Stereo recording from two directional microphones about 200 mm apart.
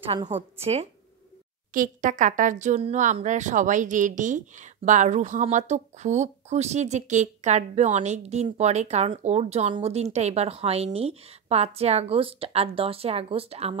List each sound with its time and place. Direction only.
0.0 s a woman's voice: 30° right (ahead or behind)
1.7 s speech: 40° right (ahead or behind)